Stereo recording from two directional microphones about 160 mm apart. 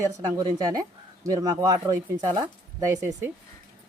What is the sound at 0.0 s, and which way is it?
A man's voice, 20° right (ahead or behind).